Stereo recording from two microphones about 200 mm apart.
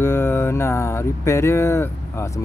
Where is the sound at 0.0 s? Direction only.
10° left (ahead or behind).